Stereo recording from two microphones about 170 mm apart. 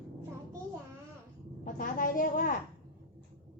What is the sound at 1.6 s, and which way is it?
Speech, 50° left (ahead or behind).